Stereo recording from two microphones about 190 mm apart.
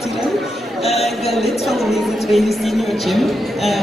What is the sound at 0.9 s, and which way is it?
Speech, 35° left (ahead or behind).